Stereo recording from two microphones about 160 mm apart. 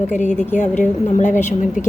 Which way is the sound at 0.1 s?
50° left (ahead or behind).